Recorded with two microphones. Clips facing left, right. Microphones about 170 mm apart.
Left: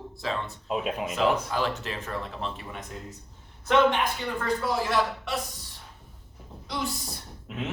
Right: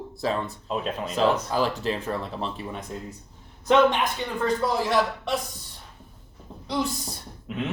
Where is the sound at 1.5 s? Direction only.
35° right (ahead or behind).